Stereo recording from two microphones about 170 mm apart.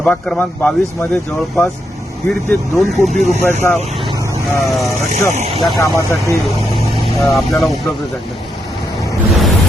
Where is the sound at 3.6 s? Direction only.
15° left (ahead or behind).